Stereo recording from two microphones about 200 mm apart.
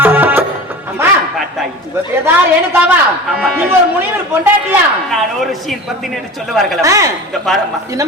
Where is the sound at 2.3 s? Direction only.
10° right (ahead or behind).